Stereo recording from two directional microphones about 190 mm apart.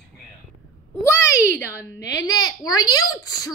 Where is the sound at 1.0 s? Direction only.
15° left (ahead or behind).